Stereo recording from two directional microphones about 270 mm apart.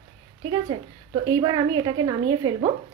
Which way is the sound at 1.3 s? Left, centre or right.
Centre.